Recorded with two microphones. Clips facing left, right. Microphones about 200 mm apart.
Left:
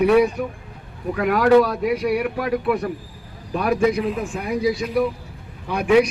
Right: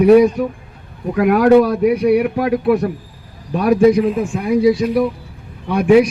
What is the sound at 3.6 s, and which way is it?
Speech, 40° right (ahead or behind).